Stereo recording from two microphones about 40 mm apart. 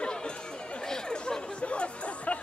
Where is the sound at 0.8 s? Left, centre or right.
Centre.